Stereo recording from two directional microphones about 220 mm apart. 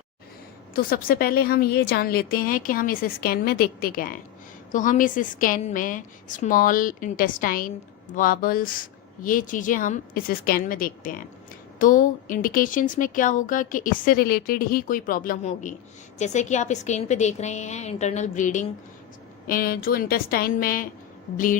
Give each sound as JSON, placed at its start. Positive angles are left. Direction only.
{"t": 0.7, "sound": "speech", "side_deg": 40}